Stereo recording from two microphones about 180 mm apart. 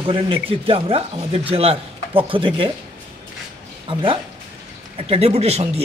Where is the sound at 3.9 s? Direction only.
30° right (ahead or behind).